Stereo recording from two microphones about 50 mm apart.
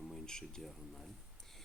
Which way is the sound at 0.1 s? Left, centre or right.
Centre.